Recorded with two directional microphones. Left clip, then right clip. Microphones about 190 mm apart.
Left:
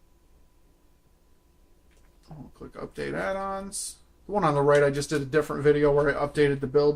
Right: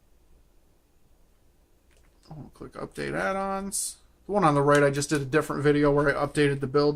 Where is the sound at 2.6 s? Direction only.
40° right (ahead or behind).